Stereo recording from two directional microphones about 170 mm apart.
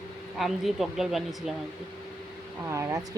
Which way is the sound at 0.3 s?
Centre (ahead or behind).